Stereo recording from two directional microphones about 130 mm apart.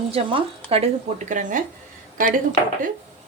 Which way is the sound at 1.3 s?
85° right.